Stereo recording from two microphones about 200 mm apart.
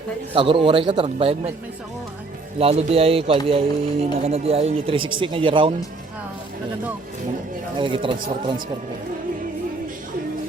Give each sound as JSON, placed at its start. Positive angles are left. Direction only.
{"t": 0.3, "sound": "speech", "side_deg": -25}
{"t": 2.6, "sound": "speech", "side_deg": -30}
{"t": 7.8, "sound": "speech", "side_deg": -25}